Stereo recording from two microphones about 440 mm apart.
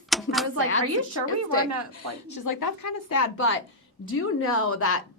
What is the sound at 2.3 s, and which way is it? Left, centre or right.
A woman's voice, left.